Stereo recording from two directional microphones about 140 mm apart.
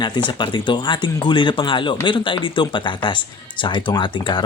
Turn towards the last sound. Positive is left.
turn(degrees=35)  # may be behind; listen again after turning